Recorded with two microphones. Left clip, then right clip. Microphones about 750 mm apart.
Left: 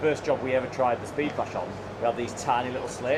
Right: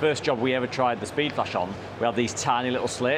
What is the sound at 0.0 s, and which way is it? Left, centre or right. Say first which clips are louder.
Speech: right 2 dB; right.